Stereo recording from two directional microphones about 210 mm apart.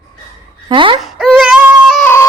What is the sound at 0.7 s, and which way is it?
Speech, 25° right (ahead or behind).